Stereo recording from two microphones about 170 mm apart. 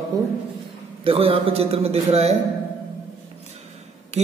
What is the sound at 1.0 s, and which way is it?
A man's voice, 35° right (ahead or behind).